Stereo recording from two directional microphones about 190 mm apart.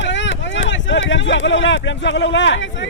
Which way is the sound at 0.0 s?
75° left (ahead or behind).